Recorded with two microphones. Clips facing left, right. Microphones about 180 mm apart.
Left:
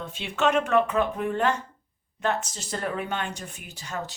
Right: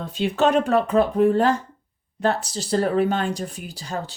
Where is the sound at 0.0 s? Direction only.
35° right (ahead or behind).